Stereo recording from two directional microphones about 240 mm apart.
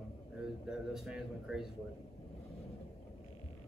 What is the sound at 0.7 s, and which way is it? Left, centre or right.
Speech, centre.